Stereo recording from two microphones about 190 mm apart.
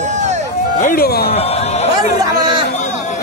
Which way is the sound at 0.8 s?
50° left (ahead or behind).